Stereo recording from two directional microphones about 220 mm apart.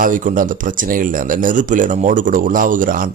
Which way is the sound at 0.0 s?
35° right (ahead or behind).